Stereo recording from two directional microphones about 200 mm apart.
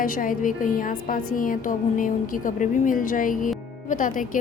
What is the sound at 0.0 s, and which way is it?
A woman's voice, 45° left (ahead or behind).